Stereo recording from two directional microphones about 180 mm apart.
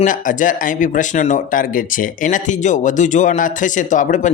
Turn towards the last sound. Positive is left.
turn(degrees=45)  # may be behind; listen again after turning